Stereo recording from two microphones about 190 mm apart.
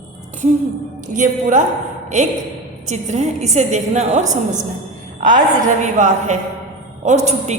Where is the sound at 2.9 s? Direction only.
40° right (ahead or behind).